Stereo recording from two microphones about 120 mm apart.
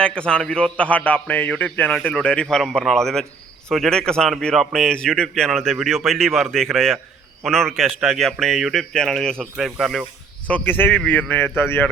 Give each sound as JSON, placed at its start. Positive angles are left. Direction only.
{"t": 0.0, "sound": "a man's voice", "side_deg": 10}
{"t": 10.5, "sound": "a man's voice", "side_deg": 15}